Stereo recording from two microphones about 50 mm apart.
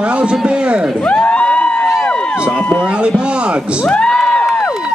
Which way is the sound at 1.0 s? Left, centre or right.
Left.